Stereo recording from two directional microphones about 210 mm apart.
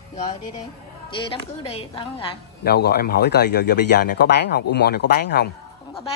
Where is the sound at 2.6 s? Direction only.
50° left (ahead or behind).